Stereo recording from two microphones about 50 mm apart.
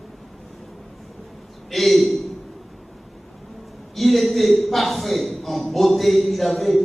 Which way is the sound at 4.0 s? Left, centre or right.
Centre.